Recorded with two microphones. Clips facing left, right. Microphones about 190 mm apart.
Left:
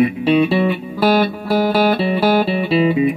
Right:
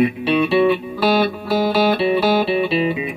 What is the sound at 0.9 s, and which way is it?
Music, 45° left (ahead or behind).